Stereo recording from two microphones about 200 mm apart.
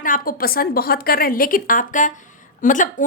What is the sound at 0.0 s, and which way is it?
A woman's voice, 45° left (ahead or behind).